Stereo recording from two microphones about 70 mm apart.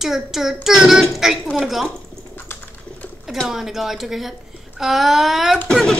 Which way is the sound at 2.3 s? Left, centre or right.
Left.